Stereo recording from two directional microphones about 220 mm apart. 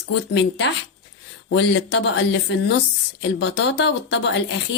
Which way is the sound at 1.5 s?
55° left (ahead or behind).